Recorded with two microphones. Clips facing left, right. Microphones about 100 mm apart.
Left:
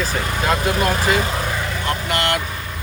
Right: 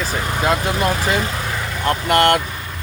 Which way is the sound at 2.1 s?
50° right (ahead or behind).